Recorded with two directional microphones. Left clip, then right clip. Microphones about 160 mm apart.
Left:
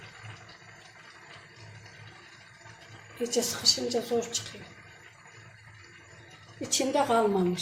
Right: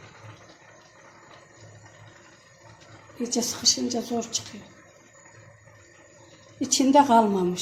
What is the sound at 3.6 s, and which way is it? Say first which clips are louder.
Speech: right 3 dB; 45° right (ahead or behind).